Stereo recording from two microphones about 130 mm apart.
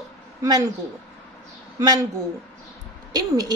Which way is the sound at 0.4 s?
30° right (ahead or behind).